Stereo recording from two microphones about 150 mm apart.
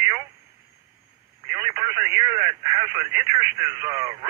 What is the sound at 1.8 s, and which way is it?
Speech, 15° right (ahead or behind).